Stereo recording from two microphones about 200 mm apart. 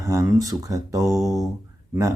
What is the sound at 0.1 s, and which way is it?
Speech, 15° right (ahead or behind).